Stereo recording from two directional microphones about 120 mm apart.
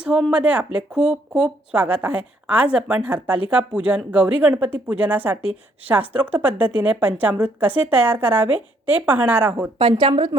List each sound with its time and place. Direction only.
0.0 s a woman's voice: 5° right (ahead or behind)
9.9 s a woman's voice: 35° right (ahead or behind)